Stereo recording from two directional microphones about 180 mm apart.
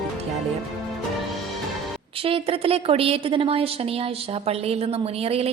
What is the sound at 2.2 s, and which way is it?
A woman's voice, 30° right (ahead or behind).